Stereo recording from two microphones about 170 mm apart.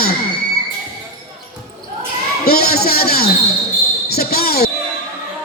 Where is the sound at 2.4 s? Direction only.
65° left (ahead or behind).